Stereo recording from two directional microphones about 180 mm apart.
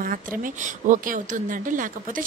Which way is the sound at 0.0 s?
50° right (ahead or behind).